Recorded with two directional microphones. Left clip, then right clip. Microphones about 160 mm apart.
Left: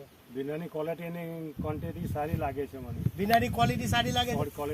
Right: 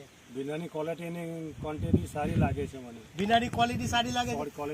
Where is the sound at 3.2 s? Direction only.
15° left (ahead or behind).